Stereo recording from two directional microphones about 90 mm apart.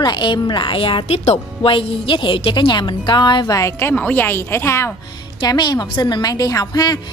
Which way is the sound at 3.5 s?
35° left (ahead or behind).